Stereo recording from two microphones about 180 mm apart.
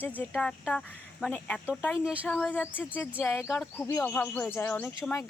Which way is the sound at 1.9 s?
5° right (ahead or behind).